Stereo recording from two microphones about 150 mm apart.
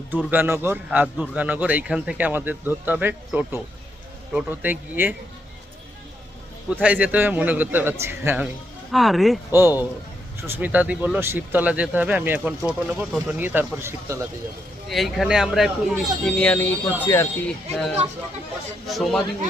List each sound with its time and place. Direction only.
0.3 s speech: 15° right (ahead or behind)
6.8 s speech: 10° right (ahead or behind)
8.9 s speech: centre (ahead or behind)
9.5 s speech: 15° right (ahead or behind)
14.8 s speech: centre (ahead or behind)
18.9 s speech: centre (ahead or behind)